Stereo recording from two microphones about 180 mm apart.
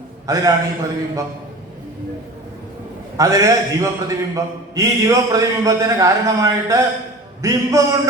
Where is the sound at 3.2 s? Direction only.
15° right (ahead or behind).